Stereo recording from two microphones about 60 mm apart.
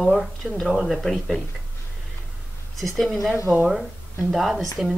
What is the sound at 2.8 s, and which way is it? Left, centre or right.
Speech, centre.